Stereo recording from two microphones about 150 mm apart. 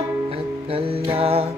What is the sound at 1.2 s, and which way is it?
Music, 40° right (ahead or behind).